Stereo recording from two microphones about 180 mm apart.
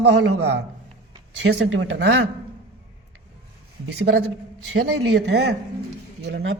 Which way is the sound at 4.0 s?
60° right (ahead or behind).